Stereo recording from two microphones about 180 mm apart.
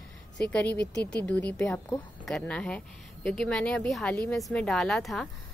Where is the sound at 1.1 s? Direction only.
5° left (ahead or behind).